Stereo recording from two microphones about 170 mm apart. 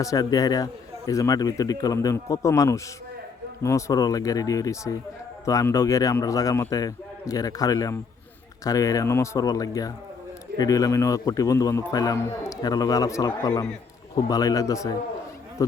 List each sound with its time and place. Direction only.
0.0 s a man's voice: 20° left (ahead or behind)